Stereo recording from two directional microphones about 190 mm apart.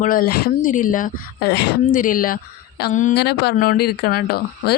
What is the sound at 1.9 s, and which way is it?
A woman's voice, 45° left (ahead or behind).